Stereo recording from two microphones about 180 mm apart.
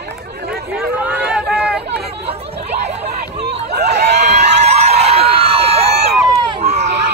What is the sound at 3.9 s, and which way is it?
Crowd, 70° right (ahead or behind).